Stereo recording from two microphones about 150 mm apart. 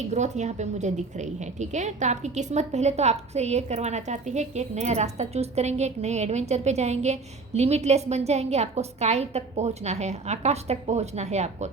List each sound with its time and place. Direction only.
0.1 s a woman's voice: 50° right (ahead or behind)